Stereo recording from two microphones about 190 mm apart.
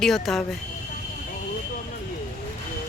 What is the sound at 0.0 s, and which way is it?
Speech, centre (ahead or behind).